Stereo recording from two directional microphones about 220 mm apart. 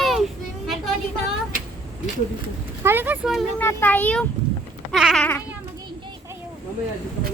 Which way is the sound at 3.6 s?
10° left (ahead or behind).